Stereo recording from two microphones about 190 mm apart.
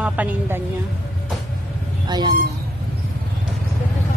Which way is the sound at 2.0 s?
20° right (ahead or behind).